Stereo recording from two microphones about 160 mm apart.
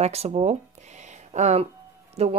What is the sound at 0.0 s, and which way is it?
Speech, 40° right (ahead or behind).